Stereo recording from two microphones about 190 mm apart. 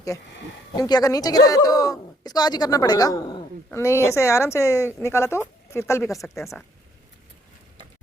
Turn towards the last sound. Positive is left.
turn(degrees=0)  # may be behind; listen again after turning